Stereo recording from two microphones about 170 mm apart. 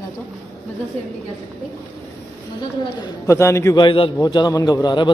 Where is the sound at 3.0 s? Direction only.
15° left (ahead or behind).